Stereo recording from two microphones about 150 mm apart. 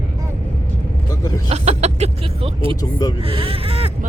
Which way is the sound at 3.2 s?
40° right (ahead or behind).